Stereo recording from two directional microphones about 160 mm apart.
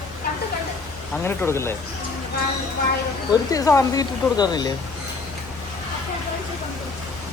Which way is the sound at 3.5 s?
20° left (ahead or behind).